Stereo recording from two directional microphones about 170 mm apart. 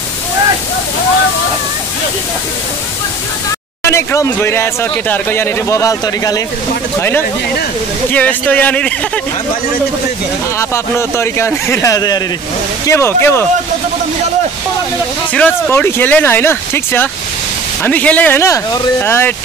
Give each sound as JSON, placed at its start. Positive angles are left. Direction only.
{"t": 3.8, "sound": "speech", "side_deg": 15}
{"t": 10.6, "sound": "speech", "side_deg": 15}
{"t": 15.3, "sound": "speech", "side_deg": 10}